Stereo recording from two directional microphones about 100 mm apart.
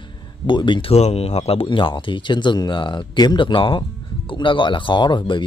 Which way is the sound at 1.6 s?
55° left (ahead or behind).